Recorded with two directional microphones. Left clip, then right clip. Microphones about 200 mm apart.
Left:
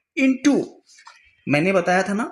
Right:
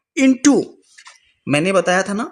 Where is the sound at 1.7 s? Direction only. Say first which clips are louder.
Right 4 dB; 45° right (ahead or behind).